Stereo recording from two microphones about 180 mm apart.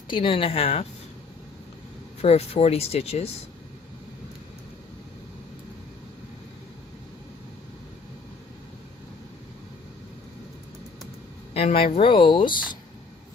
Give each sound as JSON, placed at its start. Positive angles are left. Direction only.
{"t": 0.1, "sound": "speech", "side_deg": 30}
{"t": 2.2, "sound": "speech", "side_deg": 35}
{"t": 11.5, "sound": "speech", "side_deg": 35}